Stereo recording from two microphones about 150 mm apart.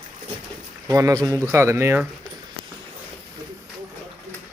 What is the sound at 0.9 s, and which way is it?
Speech, 20° right (ahead or behind).